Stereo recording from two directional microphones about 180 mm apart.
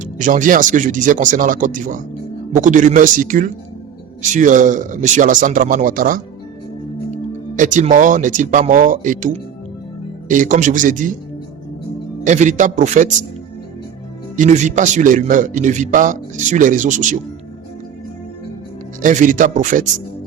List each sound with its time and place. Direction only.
0.0 s a man's voice: 45° right (ahead or behind)
12.2 s a man's voice: 45° right (ahead or behind)
14.3 s a man's voice: 40° right (ahead or behind)
19.0 s a man's voice: 45° right (ahead or behind)